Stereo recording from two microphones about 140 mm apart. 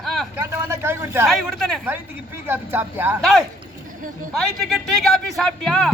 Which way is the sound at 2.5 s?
15° right (ahead or behind).